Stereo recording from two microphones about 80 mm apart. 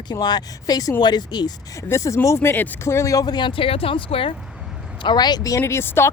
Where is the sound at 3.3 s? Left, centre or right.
Left.